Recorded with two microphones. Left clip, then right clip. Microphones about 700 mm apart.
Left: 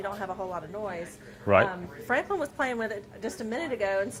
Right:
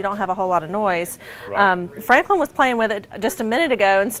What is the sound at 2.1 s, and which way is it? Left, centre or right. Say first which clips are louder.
A woman's voice: right 12 dB; right.